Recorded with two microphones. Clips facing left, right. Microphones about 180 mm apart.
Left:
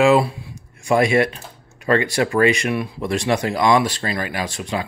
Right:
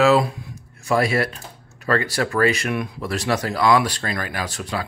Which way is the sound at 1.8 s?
15° left (ahead or behind).